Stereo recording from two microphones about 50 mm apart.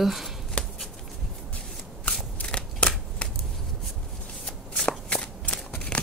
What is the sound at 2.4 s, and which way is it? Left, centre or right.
Scissors, left.